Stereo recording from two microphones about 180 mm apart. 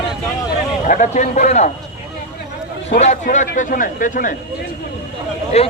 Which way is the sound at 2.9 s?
45° left (ahead or behind).